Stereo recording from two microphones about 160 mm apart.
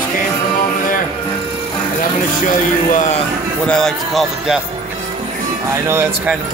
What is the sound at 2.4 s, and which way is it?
Speech, 55° left (ahead or behind).